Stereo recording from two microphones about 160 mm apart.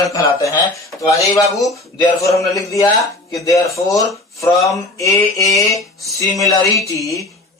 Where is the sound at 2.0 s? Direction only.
20° left (ahead or behind).